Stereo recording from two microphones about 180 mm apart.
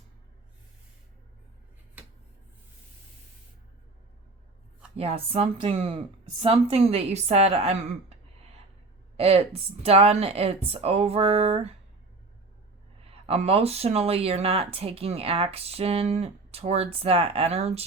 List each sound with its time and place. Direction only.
4.9 s speech: 35° right (ahead or behind)
13.2 s speech: 35° right (ahead or behind)